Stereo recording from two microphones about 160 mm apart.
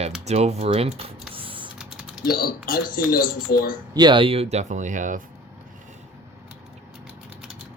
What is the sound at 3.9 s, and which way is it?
Speech, 30° right (ahead or behind).